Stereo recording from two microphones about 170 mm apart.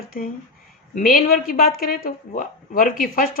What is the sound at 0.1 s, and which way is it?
Speech, 60° left (ahead or behind).